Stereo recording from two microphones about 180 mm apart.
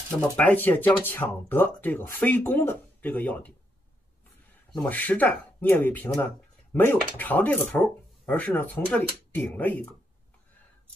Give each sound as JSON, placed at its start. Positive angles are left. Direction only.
{"t": 0.2, "sound": "speech", "side_deg": 10}
{"t": 4.7, "sound": "speech", "side_deg": 10}